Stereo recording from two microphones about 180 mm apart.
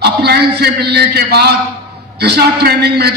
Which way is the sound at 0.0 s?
65° right (ahead or behind).